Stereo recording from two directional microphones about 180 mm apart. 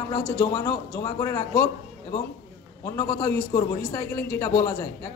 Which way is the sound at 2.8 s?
15° left (ahead or behind).